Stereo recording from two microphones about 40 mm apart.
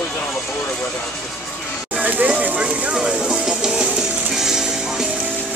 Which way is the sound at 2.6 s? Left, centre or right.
Right.